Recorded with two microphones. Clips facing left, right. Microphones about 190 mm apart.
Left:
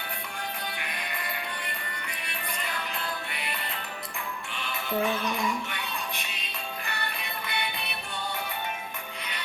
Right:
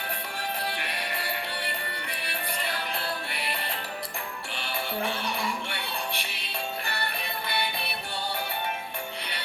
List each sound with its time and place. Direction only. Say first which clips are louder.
0.6 s music: right 3 dB; 35° right (ahead or behind)
4.5 s music: left 2 dB; 30° right (ahead or behind)